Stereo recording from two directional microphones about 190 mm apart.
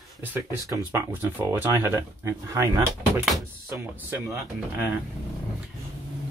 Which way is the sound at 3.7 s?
5° right (ahead or behind).